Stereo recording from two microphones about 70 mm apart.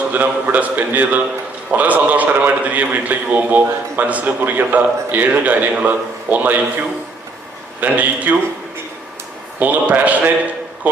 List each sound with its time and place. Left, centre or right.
0.1 s a man's voice: right
7.8 s a man's voice: right
9.6 s a man's voice: right